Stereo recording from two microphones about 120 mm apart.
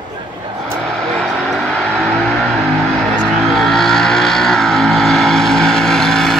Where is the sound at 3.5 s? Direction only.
Centre (ahead or behind).